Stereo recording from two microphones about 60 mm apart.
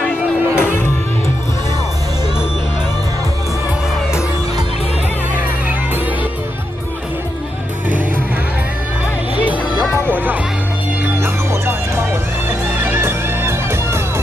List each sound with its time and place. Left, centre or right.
0.6 s music: left
9.4 s music: right
11.1 s music: right